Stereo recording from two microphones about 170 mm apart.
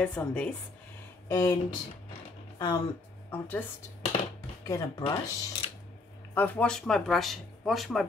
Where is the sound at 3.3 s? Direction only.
10° left (ahead or behind).